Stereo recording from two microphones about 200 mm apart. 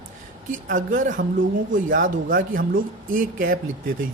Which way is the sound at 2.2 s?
45° right (ahead or behind).